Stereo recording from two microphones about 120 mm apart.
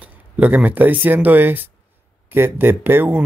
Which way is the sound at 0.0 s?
15° right (ahead or behind).